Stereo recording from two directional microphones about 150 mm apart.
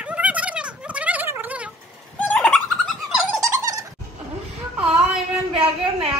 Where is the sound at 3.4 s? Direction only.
20° right (ahead or behind).